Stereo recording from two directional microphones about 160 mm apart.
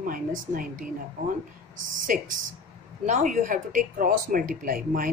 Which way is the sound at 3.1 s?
50° right (ahead or behind).